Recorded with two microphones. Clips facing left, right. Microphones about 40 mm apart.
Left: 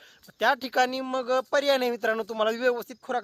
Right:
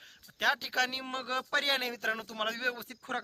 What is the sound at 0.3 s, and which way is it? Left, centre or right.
Speech, centre.